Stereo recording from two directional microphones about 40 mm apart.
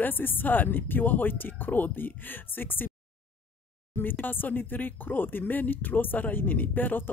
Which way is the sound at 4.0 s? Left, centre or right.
Left.